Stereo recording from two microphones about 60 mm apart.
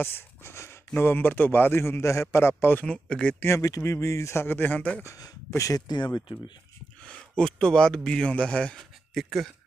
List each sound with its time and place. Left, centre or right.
0.0 s a sound: left
0.9 s a man's voice: left
2.8 s speech: centre
3.4 s speech: left
4.4 s speech: left
5.0 s speech: left
7.0 s speech: centre
8.8 s speech: centre